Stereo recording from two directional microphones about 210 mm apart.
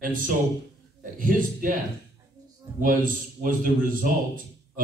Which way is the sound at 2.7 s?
40° right (ahead or behind).